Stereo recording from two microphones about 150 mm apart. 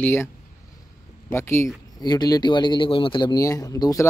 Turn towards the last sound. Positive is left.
turn(degrees=20)  # may be behind; listen again after turning